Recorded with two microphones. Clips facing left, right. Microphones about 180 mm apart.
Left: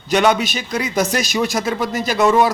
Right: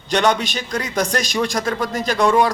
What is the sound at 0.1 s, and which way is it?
A man's voice, 10° left (ahead or behind).